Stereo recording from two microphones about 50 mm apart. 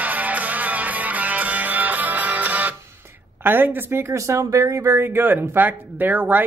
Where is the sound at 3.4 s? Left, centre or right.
Right.